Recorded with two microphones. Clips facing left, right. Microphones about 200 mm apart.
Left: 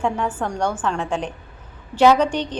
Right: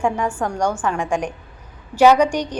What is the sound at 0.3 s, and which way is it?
A woman's voice, 10° right (ahead or behind).